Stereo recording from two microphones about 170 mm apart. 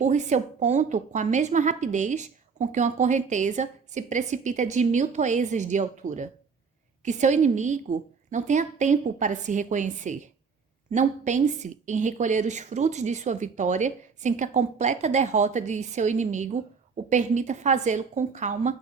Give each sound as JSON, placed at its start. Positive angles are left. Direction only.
{"t": 0.0, "sound": "a woman's voice", "side_deg": -45}